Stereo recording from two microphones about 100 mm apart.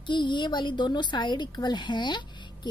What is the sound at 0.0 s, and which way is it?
Speech, 50° left (ahead or behind).